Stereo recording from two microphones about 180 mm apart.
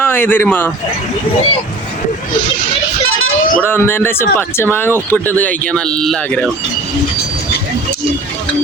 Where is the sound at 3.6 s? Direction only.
10° left (ahead or behind).